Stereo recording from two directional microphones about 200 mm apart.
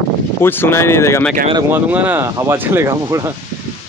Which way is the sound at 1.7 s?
10° right (ahead or behind).